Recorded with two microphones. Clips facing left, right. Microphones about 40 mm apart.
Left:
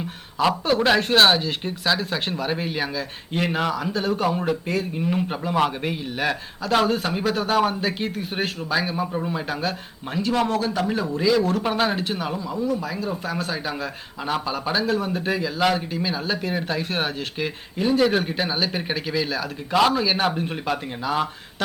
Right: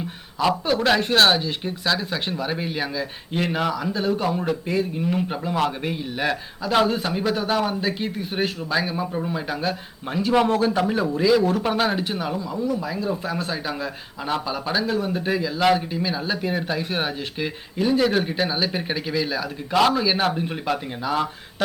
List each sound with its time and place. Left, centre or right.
0.6 s speech: centre
3.9 s speech: centre
7.5 s speech: centre
10.2 s speech: centre
11.2 s speech: centre
15.6 s speech: centre